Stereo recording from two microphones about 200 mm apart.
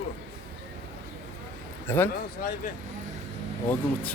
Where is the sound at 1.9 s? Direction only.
10° left (ahead or behind).